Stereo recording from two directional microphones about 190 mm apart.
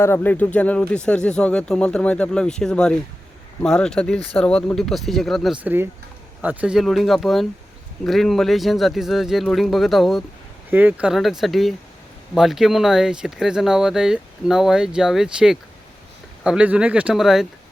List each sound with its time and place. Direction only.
0.0 s speech: 10° left (ahead or behind)
4.2 s speech: 30° left (ahead or behind)
4.4 s speech: 5° left (ahead or behind)
5.6 s speech: 10° right (ahead or behind)